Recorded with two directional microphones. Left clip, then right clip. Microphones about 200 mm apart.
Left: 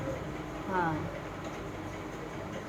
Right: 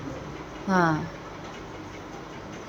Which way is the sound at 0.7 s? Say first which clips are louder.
Right 8 dB; 40° right (ahead or behind).